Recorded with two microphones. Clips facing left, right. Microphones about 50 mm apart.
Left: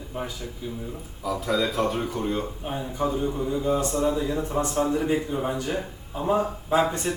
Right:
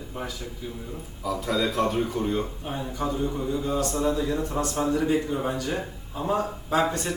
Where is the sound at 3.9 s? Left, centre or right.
Centre.